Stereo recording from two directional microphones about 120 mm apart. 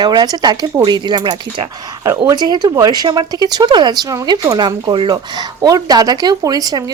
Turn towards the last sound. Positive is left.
turn(degrees=-30)  # may be behind; listen again after turning